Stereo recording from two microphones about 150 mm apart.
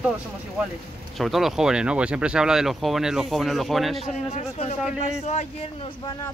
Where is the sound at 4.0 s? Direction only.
45° left (ahead or behind).